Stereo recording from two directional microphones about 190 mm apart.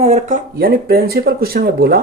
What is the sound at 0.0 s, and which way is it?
Speech, 35° right (ahead or behind).